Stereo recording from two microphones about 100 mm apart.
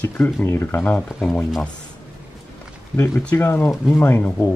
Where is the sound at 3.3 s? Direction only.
25° left (ahead or behind).